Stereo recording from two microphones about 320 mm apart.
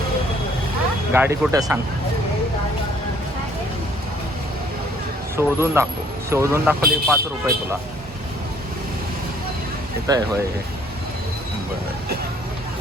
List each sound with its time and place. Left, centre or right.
1.1 s speech: centre
5.4 s speech: centre
10.1 s speech: centre